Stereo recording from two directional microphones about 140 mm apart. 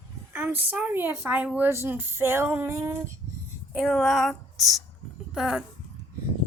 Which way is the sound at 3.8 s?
Centre (ahead or behind).